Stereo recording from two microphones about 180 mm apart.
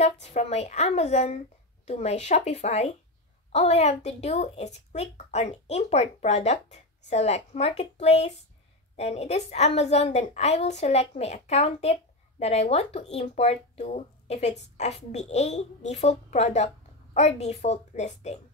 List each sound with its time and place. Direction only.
0.0 s a woman's voice: 35° left (ahead or behind)